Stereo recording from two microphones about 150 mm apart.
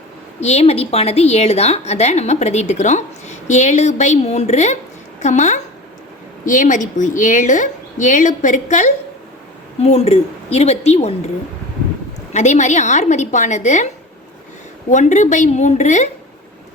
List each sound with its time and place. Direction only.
0.4 s a woman's voice: 45° left (ahead or behind)
9.8 s a woman's voice: 45° left (ahead or behind)
12.3 s a woman's voice: 50° left (ahead or behind)
14.8 s a woman's voice: 55° left (ahead or behind)